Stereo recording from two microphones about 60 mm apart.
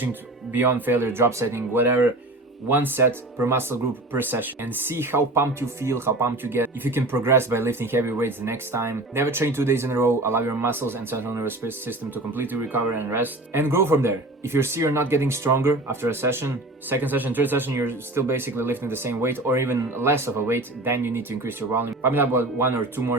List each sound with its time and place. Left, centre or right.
0.0 s speech: right
6.3 s speech: right
17.7 s speech: right